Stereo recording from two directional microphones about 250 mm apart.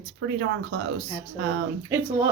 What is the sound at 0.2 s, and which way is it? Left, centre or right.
Speech, right.